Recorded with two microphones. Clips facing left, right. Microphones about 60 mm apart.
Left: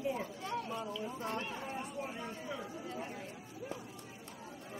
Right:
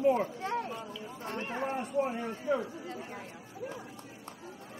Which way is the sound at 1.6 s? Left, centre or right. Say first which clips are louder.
Right 10 dB; right.